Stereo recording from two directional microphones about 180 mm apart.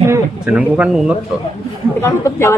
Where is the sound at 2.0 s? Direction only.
15° left (ahead or behind).